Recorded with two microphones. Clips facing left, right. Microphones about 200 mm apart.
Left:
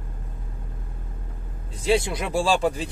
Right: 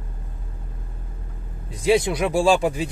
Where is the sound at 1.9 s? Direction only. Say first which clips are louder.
Right 4 dB; 15° right (ahead or behind).